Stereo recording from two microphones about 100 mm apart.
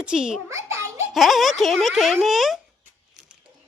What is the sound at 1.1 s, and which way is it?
A woman's voice, centre (ahead or behind).